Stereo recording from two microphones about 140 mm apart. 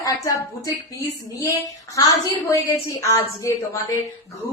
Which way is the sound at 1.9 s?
25° left (ahead or behind).